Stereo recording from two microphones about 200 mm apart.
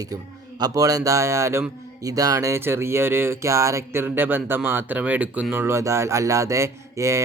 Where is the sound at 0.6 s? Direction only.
15° right (ahead or behind).